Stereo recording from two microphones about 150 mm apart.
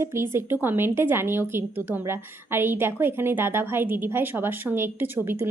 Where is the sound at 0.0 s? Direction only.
15° right (ahead or behind).